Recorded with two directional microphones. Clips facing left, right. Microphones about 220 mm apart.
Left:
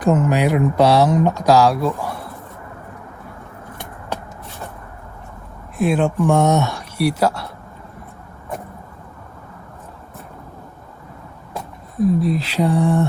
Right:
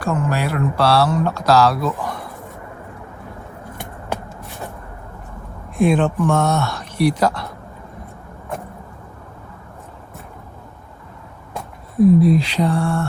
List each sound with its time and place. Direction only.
0.0 s speech: 20° left (ahead or behind)
5.7 s speech: 5° left (ahead or behind)
11.5 s a sound: centre (ahead or behind); by 13.1 s 15° left (ahead or behind)